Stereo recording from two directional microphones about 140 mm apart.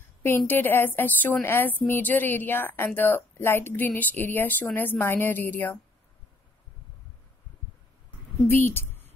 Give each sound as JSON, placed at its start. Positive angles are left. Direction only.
{"t": 0.2, "sound": "a woman's voice", "side_deg": 15}
{"t": 8.5, "sound": "a woman's voice", "side_deg": 15}